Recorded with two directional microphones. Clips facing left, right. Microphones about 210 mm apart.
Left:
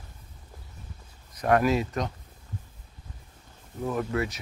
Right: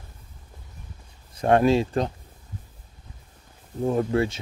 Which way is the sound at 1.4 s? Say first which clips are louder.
Right 4 dB; 30° right (ahead or behind).